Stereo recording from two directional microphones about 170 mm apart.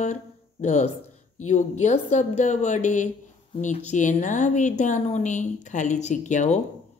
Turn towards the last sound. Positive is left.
turn(degrees=45)  # may be behind; listen again after turning